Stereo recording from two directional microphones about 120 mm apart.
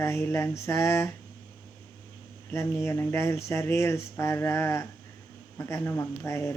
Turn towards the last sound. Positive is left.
turn(degrees=20)  # may be behind; listen again after turning